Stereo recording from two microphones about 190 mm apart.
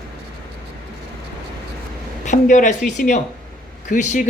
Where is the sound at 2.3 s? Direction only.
40° left (ahead or behind).